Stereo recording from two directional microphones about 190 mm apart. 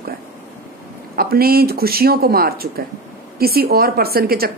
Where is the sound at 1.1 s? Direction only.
50° right (ahead or behind).